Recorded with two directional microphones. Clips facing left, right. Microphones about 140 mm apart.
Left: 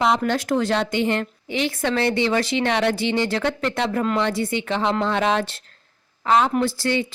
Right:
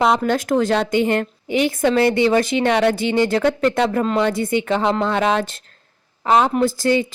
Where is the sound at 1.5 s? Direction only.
20° right (ahead or behind).